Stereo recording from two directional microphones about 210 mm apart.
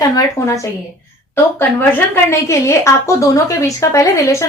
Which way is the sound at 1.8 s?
10° left (ahead or behind).